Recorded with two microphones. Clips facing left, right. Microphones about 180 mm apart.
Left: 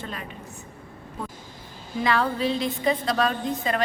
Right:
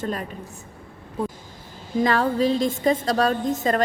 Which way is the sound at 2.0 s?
40° right (ahead or behind).